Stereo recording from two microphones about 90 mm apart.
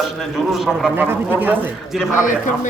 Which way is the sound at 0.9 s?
20° right (ahead or behind).